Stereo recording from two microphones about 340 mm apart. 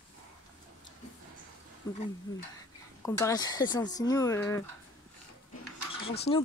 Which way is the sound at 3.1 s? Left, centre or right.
Centre.